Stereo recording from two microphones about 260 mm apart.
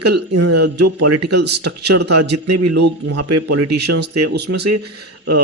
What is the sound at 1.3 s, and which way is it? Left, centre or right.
Speech, right.